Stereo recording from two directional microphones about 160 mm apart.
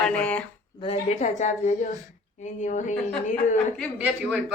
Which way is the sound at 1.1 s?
50° left (ahead or behind).